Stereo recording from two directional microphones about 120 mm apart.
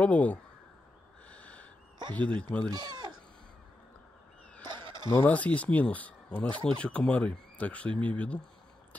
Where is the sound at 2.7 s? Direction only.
35° right (ahead or behind).